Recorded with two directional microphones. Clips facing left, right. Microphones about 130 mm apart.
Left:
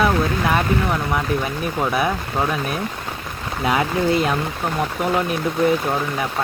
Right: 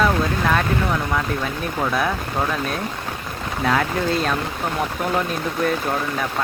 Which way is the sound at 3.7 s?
10° left (ahead or behind).